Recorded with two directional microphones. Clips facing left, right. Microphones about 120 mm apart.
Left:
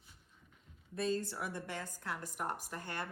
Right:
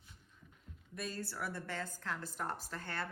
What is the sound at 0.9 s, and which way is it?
A woman's voice, 25° left (ahead or behind).